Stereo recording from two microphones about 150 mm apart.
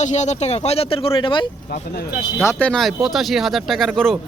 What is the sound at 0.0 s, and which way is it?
Speech, 50° left (ahead or behind).